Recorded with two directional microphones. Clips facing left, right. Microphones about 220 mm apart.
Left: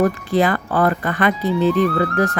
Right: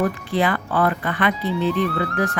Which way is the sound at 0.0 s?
40° left (ahead or behind).